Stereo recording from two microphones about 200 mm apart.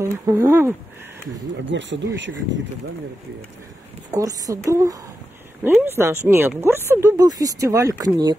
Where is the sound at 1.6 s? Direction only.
65° right (ahead or behind).